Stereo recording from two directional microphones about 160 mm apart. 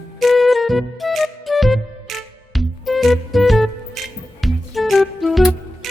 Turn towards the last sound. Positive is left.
turn(degrees=0)  # may be behind; listen again after turning